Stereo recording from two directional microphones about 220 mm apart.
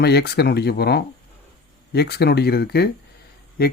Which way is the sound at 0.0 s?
45° left (ahead or behind).